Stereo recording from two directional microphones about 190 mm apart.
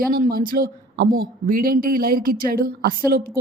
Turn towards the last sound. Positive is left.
turn(degrees=-50)  # may be behind; listen again after turning